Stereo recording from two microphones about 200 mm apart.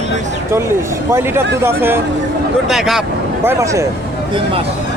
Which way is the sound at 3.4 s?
15° right (ahead or behind).